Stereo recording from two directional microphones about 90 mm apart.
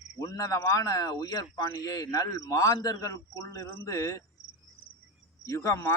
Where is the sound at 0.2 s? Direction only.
40° left (ahead or behind).